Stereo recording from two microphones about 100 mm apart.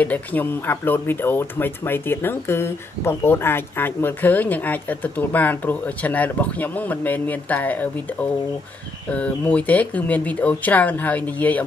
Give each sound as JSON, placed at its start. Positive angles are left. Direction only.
{"t": 0.0, "sound": "speech", "side_deg": 15}